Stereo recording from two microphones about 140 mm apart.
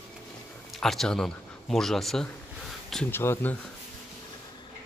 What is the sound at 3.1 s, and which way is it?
Speech, 15° left (ahead or behind).